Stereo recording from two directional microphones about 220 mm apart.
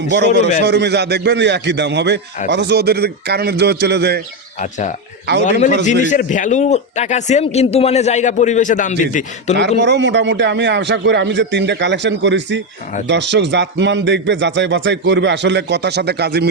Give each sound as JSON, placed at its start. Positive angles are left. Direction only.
{"t": 0.6, "sound": "speech", "side_deg": -50}
{"t": 4.6, "sound": "a man's voice", "side_deg": 35}
{"t": 9.6, "sound": "speech", "side_deg": -50}